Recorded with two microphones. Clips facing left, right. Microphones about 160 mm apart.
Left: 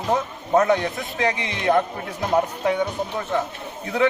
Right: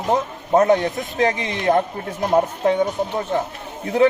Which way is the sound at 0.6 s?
40° right (ahead or behind).